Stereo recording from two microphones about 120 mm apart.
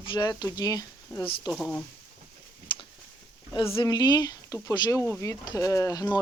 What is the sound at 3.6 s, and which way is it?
Speech, 40° left (ahead or behind).